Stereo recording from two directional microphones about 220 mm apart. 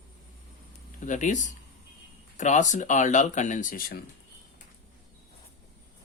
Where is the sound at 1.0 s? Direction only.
35° left (ahead or behind).